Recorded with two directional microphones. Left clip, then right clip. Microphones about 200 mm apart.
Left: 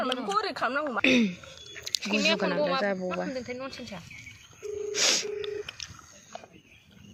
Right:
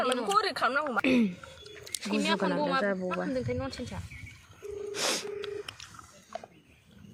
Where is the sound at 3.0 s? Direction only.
55° right (ahead or behind).